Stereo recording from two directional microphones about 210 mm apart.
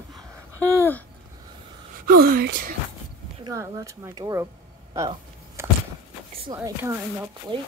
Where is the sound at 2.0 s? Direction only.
45° right (ahead or behind).